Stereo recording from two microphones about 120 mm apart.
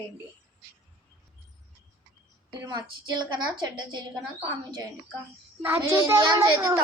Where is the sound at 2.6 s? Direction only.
40° right (ahead or behind).